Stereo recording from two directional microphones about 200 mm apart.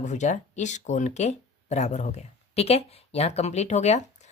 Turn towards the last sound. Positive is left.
turn(degrees=35)  # may be behind; listen again after turning